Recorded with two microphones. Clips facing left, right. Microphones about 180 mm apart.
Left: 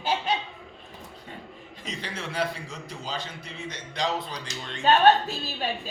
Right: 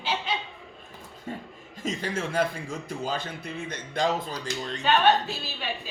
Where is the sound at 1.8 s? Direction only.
45° right (ahead or behind).